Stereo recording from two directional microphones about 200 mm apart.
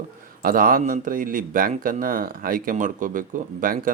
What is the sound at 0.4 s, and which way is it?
Speech, 45° right (ahead or behind).